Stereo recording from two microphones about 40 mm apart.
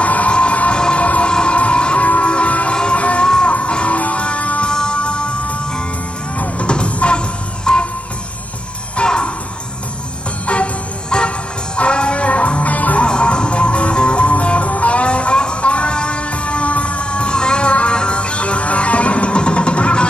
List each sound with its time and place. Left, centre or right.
0.0 s music: left
1.0 s music: left
2.7 s music: left
3.0 s music: left
3.3 s music: centre
3.5 s music: left
4.6 s music: left
6.3 s music: left
6.7 s music: left
8.9 s music: left
10.4 s music: left
13.0 s music: left